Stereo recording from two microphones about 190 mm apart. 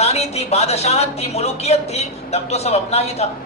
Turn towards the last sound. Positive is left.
turn(degrees=35)  # may be behind; listen again after turning